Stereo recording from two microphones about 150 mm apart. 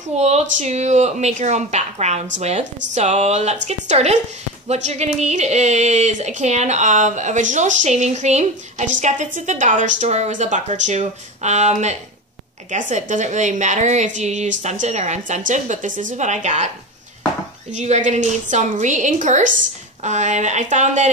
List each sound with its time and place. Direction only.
0.1 s speech: 45° right (ahead or behind)
17.7 s a woman's voice: 50° right (ahead or behind)